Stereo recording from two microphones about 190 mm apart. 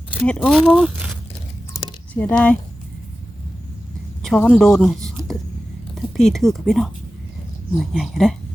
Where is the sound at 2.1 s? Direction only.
5° left (ahead or behind).